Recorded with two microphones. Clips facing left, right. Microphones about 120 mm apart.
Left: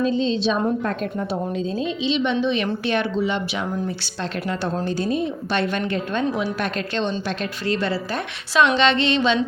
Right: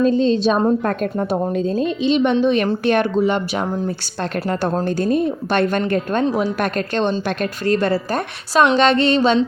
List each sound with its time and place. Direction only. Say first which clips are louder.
0.0 s a woman's voice: right 5 dB; 45° right (ahead or behind)